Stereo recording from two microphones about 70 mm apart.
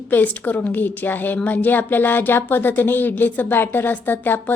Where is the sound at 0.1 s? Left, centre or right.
Left.